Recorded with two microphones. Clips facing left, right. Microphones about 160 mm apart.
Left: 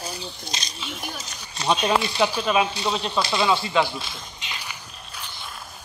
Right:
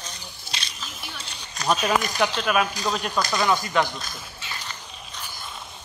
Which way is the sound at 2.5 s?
25° left (ahead or behind).